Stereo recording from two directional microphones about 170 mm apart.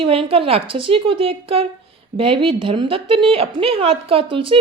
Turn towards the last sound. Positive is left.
turn(degrees=-30)  # may be behind; listen again after turning